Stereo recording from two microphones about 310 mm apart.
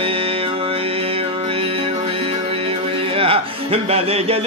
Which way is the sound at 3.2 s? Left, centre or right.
Centre.